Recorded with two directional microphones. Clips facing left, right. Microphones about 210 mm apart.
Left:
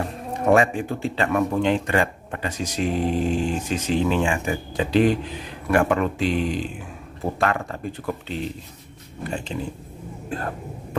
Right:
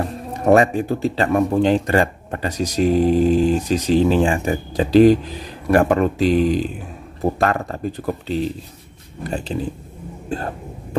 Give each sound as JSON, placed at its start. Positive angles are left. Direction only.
{"t": 0.5, "sound": "speech", "side_deg": -40}